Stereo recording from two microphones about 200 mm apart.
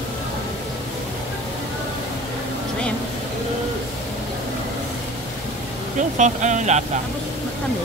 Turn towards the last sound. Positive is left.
turn(degrees=-35)  # may be behind; listen again after turning